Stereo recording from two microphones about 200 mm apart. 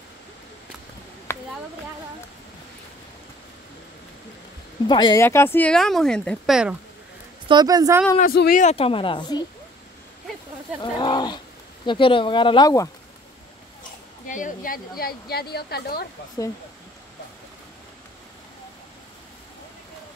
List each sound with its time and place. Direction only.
1.3 s a sound: 10° left (ahead or behind)
4.8 s speech: 20° left (ahead or behind); by 6.8 s 5° right (ahead or behind)
7.4 s a woman's voice: 20° right (ahead or behind)
8.2 s speech: 45° left (ahead or behind); by 9.4 s 25° left (ahead or behind)
10.8 s speech: 20° left (ahead or behind)
14.2 s speech: 40° left (ahead or behind)